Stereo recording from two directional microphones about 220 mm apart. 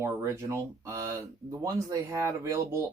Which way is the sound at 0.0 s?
10° right (ahead or behind).